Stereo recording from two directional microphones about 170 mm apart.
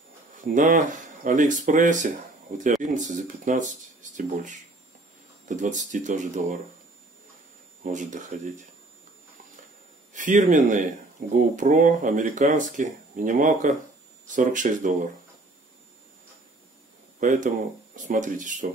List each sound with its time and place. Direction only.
0.4 s speech: 50° right (ahead or behind)
7.8 s speech: 45° right (ahead or behind)
10.1 s speech: 50° right (ahead or behind)
17.2 s speech: 50° right (ahead or behind)